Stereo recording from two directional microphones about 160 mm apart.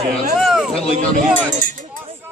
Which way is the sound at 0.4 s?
Centre (ahead or behind).